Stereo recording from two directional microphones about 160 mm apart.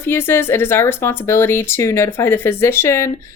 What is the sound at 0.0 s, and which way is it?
Speech, 15° left (ahead or behind).